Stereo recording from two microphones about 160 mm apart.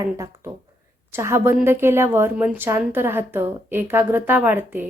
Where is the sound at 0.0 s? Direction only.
20° right (ahead or behind).